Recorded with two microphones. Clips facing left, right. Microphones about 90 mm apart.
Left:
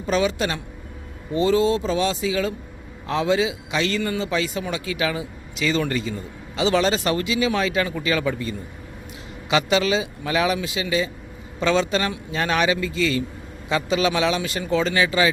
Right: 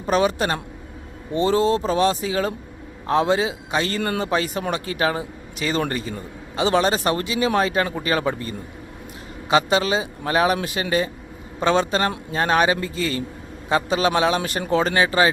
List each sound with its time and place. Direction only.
0.0 s speech: 45° right (ahead or behind)
4.0 s speech: 55° right (ahead or behind)
11.6 s speech: 40° right (ahead or behind)